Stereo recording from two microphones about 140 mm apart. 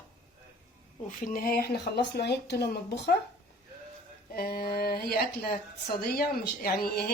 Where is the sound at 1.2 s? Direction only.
85° left.